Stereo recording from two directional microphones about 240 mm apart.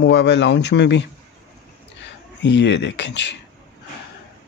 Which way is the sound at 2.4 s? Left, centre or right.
Left.